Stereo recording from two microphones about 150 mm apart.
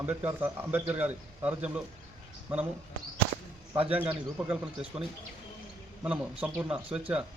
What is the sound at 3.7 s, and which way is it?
Speech, 40° right (ahead or behind).